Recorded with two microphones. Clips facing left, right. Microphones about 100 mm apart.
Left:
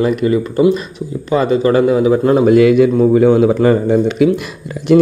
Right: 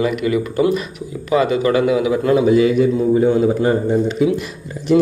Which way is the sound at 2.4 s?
65° left (ahead or behind).